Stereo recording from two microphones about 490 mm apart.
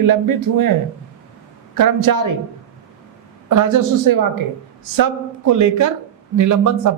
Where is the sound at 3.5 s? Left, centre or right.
Right.